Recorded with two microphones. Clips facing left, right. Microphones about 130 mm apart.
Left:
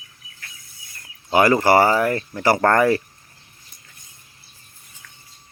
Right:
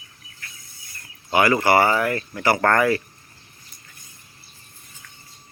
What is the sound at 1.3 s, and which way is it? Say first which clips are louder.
Speech: left 2 dB; 35° left (ahead or behind).